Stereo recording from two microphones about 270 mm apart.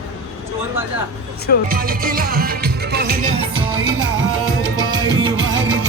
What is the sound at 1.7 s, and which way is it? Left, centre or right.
Music, right.